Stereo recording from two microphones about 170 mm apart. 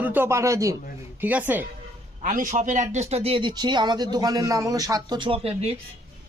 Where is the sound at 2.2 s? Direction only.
50° right (ahead or behind); by 5.5 s 30° right (ahead or behind).